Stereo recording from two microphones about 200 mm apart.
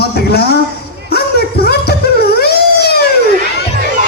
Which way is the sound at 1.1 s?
50° left (ahead or behind).